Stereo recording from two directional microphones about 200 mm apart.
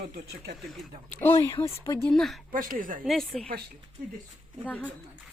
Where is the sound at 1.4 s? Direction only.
15° left (ahead or behind).